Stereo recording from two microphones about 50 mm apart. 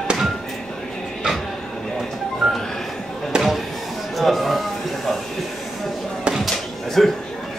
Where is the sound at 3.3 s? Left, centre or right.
Centre.